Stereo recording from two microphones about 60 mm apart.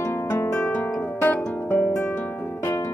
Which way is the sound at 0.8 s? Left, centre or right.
Left.